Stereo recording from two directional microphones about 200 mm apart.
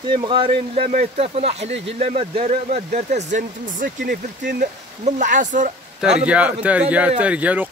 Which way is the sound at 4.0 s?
55° right (ahead or behind).